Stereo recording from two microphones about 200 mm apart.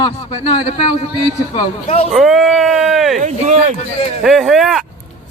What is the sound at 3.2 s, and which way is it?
Speech, 40° right (ahead or behind).